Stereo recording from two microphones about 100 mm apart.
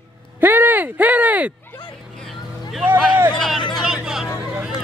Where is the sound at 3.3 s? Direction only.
Centre (ahead or behind).